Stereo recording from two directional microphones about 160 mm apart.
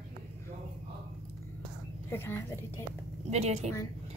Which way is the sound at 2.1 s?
15° left (ahead or behind).